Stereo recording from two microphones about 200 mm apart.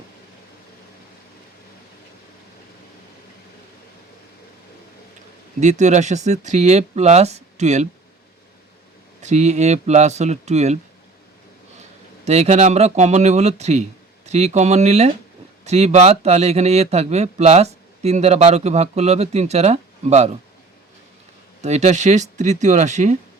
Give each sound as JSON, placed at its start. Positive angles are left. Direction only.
{"t": 5.5, "sound": "speech", "side_deg": -35}
{"t": 9.2, "sound": "speech", "side_deg": -35}
{"t": 12.2, "sound": "speech", "side_deg": -35}
{"t": 21.6, "sound": "speech", "side_deg": -35}